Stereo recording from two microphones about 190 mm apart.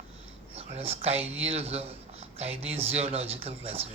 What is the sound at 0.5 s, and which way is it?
A man's voice, 30° right (ahead or behind).